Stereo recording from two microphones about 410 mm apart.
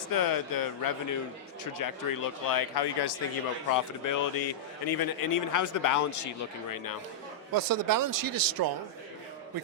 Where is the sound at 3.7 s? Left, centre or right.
Left.